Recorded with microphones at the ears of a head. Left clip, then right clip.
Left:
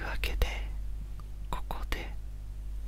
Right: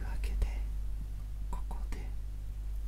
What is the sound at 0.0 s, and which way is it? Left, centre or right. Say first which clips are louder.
Whispering: left 13 dB; left.